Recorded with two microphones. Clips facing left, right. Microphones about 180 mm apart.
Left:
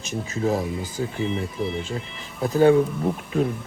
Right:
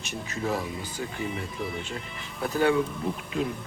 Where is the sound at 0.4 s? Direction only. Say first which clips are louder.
Left 6 dB; 45° left (ahead or behind).